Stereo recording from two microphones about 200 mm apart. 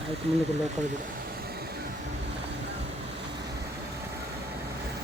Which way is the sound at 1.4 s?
50° right (ahead or behind).